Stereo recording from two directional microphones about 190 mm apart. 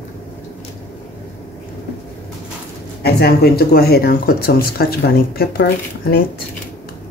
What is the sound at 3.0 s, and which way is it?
Speech, 55° left (ahead or behind).